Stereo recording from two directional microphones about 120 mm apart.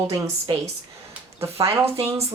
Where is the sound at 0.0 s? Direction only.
25° right (ahead or behind).